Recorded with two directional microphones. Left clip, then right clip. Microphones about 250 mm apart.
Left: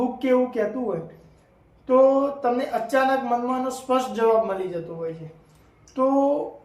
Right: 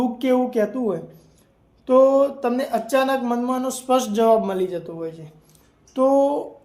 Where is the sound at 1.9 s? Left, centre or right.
Right.